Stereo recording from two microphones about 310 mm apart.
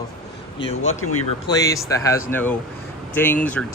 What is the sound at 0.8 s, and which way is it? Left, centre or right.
Speech, left.